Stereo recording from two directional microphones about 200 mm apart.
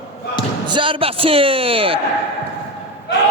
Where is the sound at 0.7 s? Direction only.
25° right (ahead or behind).